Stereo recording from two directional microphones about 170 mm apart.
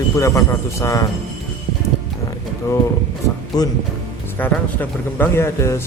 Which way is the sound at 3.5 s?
20° left (ahead or behind).